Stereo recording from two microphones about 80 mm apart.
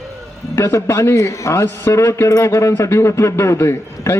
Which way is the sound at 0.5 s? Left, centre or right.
Left.